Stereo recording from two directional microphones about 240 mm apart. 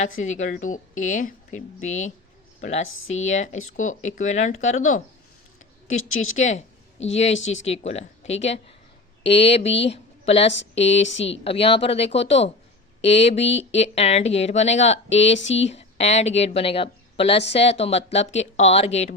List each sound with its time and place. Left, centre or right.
0.0 s a woman's voice: left
6.0 s speech: left
6.3 s speech: left
7.3 s speech: left
7.6 s a woman's voice: left